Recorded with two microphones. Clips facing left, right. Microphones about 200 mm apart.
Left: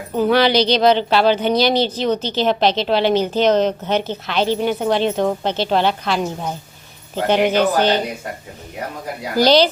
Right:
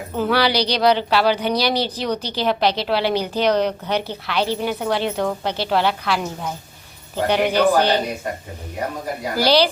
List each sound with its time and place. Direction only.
0.2 s speech: 20° left (ahead or behind)
7.3 s speech: 20° left (ahead or behind)
9.4 s speech: 20° left (ahead or behind)